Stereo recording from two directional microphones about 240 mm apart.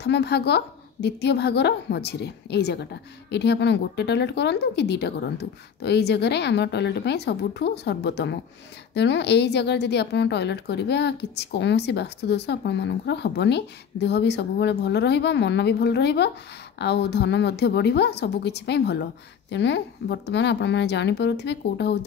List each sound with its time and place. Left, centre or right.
0.0 s a woman's voice: left